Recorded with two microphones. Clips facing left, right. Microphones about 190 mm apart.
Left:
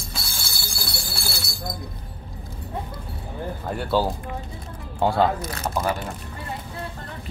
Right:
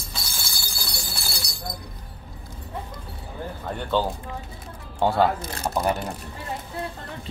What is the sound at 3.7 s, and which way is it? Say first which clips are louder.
Speech: left 2 dB; 10° left (ahead or behind).